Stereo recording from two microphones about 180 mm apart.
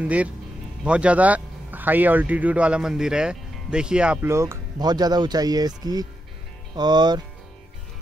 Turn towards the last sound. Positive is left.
turn(degrees=-25)  # may be behind; listen again after turning